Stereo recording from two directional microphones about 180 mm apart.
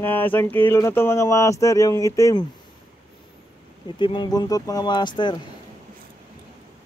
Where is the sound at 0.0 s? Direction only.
10° left (ahead or behind).